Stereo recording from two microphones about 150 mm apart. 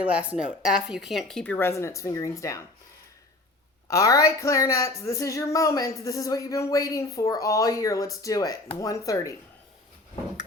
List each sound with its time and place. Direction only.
0.0 s speech: 10° right (ahead or behind)
1.5 s speech: 15° left (ahead or behind)
3.8 s speech: 20° left (ahead or behind)